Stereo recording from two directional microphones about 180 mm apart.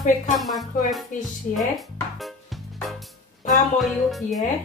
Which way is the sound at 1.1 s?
45° left (ahead or behind).